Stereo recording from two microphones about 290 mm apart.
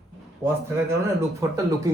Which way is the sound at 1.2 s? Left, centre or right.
Centre.